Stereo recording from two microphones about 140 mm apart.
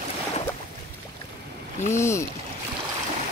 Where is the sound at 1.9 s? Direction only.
20° left (ahead or behind).